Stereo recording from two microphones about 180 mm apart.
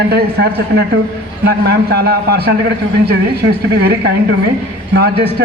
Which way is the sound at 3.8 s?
60° right (ahead or behind).